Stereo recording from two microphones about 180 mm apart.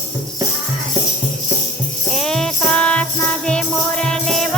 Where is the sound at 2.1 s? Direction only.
Centre (ahead or behind).